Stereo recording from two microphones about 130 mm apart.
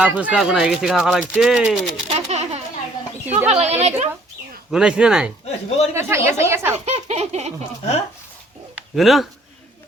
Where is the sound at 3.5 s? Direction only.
55° right (ahead or behind).